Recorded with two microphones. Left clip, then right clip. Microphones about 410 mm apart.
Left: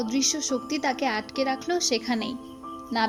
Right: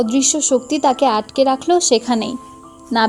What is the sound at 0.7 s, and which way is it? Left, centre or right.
Speech, left.